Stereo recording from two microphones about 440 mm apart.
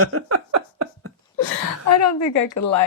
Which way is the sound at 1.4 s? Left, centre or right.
Left.